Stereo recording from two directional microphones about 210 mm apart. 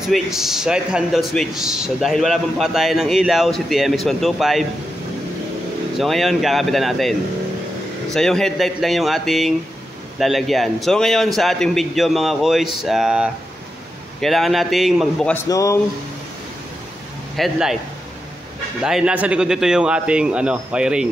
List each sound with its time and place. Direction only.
0.1 s a man's voice: centre (ahead or behind)
5.9 s a man's voice: centre (ahead or behind)
15.4 s speech: 15° left (ahead or behind)
17.4 s a man's voice: centre (ahead or behind)
18.8 s a man's voice: 5° right (ahead or behind)